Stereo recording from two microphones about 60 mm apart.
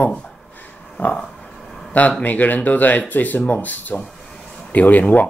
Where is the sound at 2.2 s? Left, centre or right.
Left.